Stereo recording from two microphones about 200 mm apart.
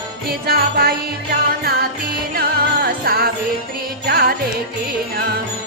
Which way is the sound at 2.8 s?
50° right (ahead or behind).